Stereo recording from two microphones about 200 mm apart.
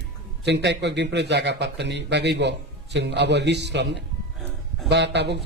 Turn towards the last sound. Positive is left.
turn(degrees=-60)  # may be behind; listen again after turning